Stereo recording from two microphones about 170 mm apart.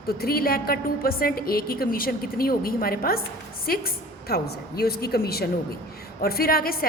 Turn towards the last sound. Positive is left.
turn(degrees=60)  # may be behind; listen again after turning